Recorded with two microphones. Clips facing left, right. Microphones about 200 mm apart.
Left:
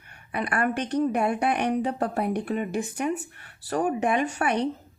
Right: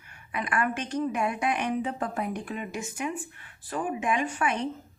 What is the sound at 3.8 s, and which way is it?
Speech, 45° left (ahead or behind).